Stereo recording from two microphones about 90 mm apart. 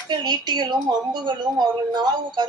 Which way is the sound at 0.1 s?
55° right (ahead or behind).